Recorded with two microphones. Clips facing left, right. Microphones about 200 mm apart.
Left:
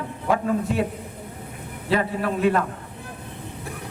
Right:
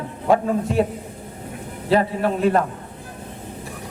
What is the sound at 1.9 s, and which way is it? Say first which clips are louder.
Speech: right 4 dB; 30° right (ahead or behind).